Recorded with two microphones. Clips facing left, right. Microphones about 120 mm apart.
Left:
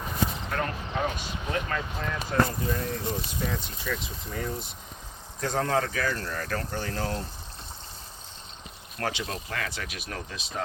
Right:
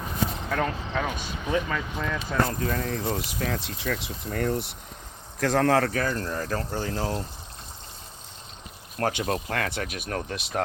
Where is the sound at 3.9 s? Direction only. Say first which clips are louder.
Right 5 dB; 65° right (ahead or behind).